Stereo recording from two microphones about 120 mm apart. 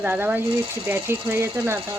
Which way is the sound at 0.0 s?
15° right (ahead or behind).